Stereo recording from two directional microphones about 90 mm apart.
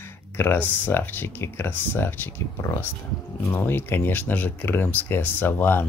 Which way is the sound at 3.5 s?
25° left (ahead or behind).